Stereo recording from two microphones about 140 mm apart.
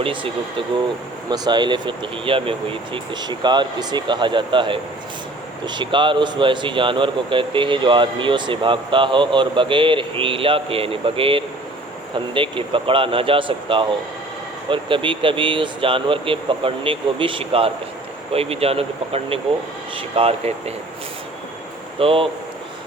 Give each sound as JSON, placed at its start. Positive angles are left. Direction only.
{"t": 0.0, "sound": "a man's voice", "side_deg": -35}
{"t": 1.3, "sound": "a man's voice", "side_deg": -30}
{"t": 21.9, "sound": "a man's voice", "side_deg": -40}